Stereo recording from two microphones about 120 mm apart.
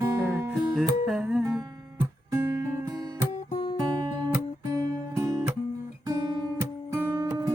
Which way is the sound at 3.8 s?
30° right (ahead or behind).